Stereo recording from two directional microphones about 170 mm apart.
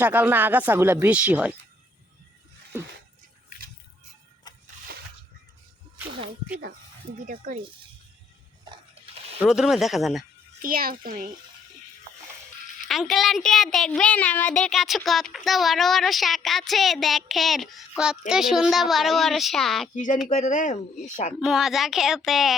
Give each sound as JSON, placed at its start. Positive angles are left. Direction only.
{"t": 0.0, "sound": "speech", "side_deg": -10}
{"t": 6.1, "sound": "speech", "side_deg": -30}
{"t": 7.3, "sound": "speech", "side_deg": -50}
{"t": 9.4, "sound": "speech", "side_deg": -5}
{"t": 10.6, "sound": "a child's voice", "side_deg": -55}
{"t": 12.9, "sound": "speech", "side_deg": 0}
{"t": 20.2, "sound": "speech", "side_deg": 45}
{"t": 21.4, "sound": "speech", "side_deg": -5}